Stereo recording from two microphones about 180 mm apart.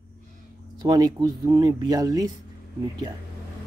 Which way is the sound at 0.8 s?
20° right (ahead or behind).